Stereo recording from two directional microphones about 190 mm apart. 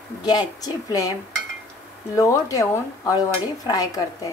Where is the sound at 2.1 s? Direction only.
15° left (ahead or behind).